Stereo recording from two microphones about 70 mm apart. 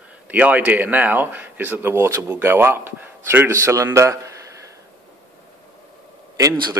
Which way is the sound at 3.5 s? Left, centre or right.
Right.